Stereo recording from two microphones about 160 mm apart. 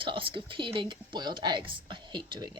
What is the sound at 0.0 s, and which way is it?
Speech, 30° right (ahead or behind).